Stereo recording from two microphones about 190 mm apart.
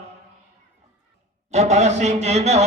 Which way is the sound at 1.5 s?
35° right (ahead or behind).